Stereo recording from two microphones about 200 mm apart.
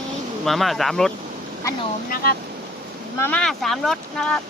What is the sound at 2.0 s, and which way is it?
Speech, 45° left (ahead or behind).